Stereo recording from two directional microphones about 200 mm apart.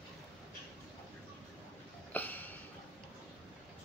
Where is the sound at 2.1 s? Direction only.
10° left (ahead or behind).